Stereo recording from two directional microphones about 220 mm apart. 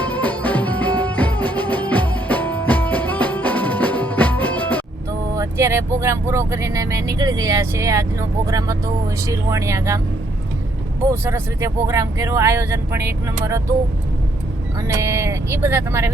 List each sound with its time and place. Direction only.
0.0 s music: 5° left (ahead or behind)
5.3 s speech: 15° right (ahead or behind)
11.1 s speech: 10° right (ahead or behind)
15.0 s speech: 10° right (ahead or behind)